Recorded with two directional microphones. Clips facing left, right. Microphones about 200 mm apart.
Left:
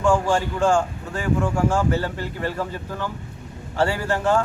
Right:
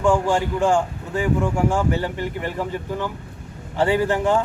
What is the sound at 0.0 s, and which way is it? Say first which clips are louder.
A man's voice: right 1 dB; 15° right (ahead or behind).